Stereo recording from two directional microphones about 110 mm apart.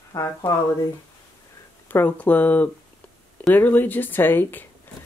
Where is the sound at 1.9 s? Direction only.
15° left (ahead or behind).